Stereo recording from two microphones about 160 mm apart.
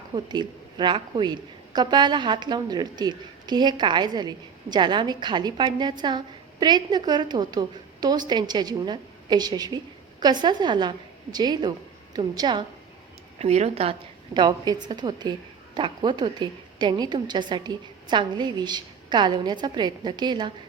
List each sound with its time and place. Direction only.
0.1 s a woman's voice: 30° right (ahead or behind)
13.4 s a woman's voice: 45° right (ahead or behind)
14.3 s a woman's voice: 25° right (ahead or behind)